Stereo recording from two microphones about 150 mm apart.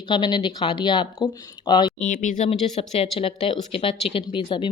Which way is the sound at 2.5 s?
45° left (ahead or behind).